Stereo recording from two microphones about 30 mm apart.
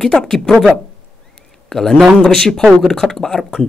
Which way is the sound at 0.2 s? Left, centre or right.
Centre.